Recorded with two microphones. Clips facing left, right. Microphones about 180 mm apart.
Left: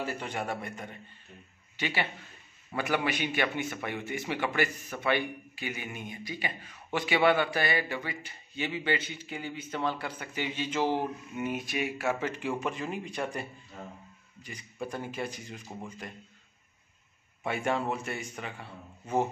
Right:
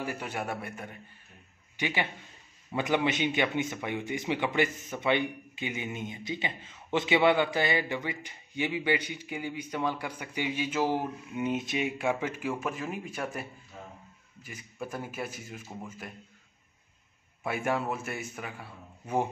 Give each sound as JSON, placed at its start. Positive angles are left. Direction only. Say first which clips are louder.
{"t": 0.0, "sound": "a man's voice", "louder": "even", "side_deg": -10}
{"t": 17.4, "sound": "a man's voice", "louder": "even", "side_deg": -5}